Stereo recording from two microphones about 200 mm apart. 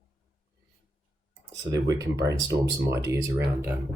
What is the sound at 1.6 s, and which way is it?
Speech, 15° right (ahead or behind).